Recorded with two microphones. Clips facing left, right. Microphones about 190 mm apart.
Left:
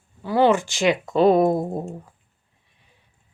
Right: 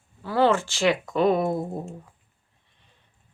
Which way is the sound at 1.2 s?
35° left (ahead or behind).